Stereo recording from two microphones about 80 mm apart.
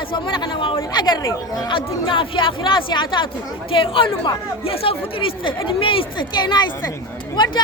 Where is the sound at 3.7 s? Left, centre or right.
Left.